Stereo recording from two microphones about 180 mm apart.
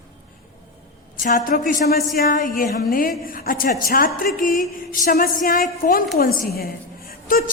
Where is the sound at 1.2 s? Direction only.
50° left (ahead or behind).